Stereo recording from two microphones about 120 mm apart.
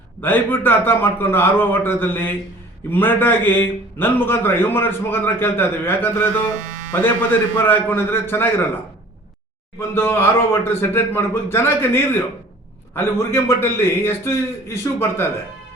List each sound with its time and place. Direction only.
0.2 s a man's voice: 15° left (ahead or behind)
9.9 s a man's voice: 20° left (ahead or behind)